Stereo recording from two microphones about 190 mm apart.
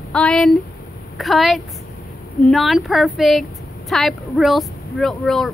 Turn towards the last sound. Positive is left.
turn(degrees=0)  # may be behind; listen again after turning